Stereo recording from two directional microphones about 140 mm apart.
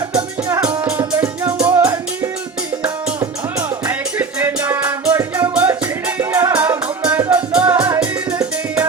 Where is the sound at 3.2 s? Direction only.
25° right (ahead or behind).